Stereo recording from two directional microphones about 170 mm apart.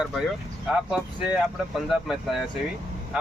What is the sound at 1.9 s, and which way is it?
Speech, centre (ahead or behind).